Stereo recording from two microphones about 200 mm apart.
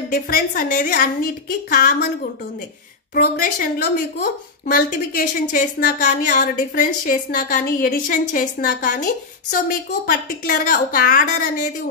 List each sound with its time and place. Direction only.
0.1 s a woman's voice: 45° left (ahead or behind)
3.2 s a woman's voice: 50° left (ahead or behind)